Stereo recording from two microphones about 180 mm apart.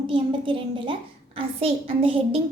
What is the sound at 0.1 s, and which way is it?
A woman's voice, 30° right (ahead or behind).